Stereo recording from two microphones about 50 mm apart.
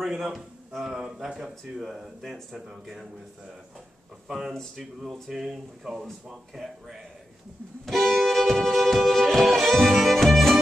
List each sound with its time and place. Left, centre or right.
0.2 s speech: centre
4.3 s speech: centre
7.8 s music: centre